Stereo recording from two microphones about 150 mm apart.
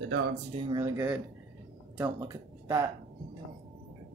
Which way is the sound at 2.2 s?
20° right (ahead or behind).